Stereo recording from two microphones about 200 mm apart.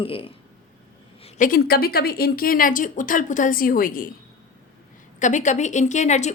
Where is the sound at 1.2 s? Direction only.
45° left (ahead or behind).